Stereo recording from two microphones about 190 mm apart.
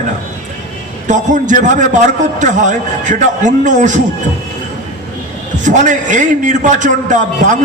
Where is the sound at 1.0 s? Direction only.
40° right (ahead or behind).